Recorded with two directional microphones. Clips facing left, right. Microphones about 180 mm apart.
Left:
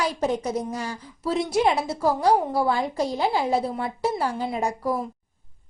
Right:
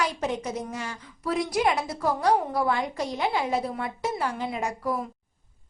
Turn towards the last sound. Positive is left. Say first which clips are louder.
# left 3 dB
turn(degrees=35)  # may be behind; listen again after turning